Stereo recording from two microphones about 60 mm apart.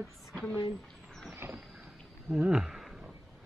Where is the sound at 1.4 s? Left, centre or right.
Right.